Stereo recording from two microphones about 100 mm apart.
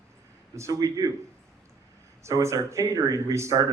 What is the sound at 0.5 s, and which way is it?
Speech, 35° right (ahead or behind).